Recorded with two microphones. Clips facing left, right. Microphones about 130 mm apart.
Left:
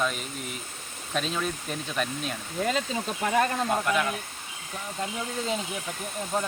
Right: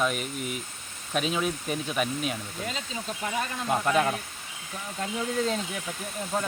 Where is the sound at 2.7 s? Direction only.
55° left (ahead or behind).